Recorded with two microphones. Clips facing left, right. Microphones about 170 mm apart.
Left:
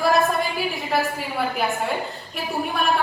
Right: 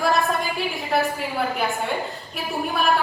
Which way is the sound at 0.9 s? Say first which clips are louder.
Right 2 dB; centre (ahead or behind).